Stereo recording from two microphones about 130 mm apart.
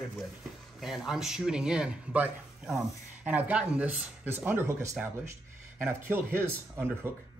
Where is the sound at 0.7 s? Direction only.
5° right (ahead or behind).